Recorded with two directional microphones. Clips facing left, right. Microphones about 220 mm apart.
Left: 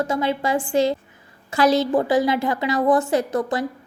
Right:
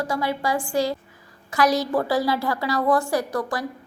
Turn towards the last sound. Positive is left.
turn(degrees=20)  # may be behind; listen again after turning